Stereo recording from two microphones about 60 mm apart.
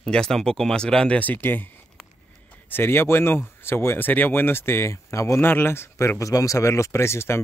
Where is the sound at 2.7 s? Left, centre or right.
Left.